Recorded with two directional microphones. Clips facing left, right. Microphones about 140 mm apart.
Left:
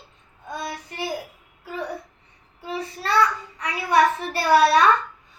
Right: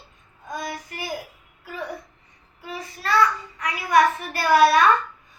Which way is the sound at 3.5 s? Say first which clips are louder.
Even; 35° left (ahead or behind).